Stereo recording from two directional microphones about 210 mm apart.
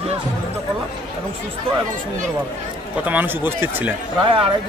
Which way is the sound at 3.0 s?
10° right (ahead or behind).